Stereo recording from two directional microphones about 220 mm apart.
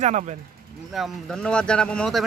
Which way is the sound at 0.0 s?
35° right (ahead or behind).